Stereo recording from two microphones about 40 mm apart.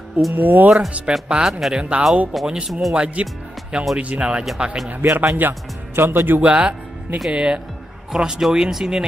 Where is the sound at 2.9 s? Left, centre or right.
Right.